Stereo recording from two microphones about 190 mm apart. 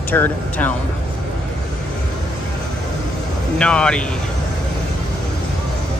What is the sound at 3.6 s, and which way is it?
Speech, 5° left (ahead or behind).